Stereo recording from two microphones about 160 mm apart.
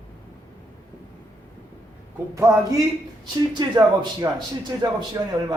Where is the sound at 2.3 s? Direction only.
20° right (ahead or behind).